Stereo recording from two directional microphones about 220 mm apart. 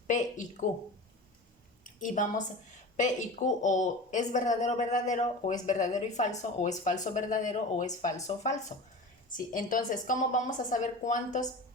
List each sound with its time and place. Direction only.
0.1 s speech: 35° left (ahead or behind)
1.8 s a woman's voice: 35° left (ahead or behind)